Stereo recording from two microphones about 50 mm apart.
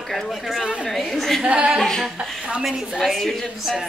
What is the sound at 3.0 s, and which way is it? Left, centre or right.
Speech, centre.